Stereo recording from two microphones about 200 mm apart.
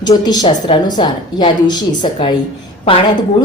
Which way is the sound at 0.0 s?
20° left (ahead or behind).